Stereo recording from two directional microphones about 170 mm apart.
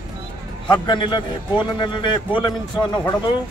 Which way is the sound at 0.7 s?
25° left (ahead or behind).